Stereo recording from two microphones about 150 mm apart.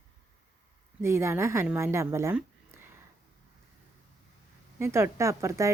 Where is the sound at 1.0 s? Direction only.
15° right (ahead or behind).